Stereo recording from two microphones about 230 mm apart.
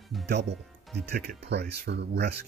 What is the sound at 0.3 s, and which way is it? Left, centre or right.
Speech, right.